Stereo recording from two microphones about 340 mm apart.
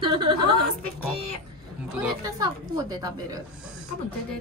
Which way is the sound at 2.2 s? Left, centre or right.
Centre.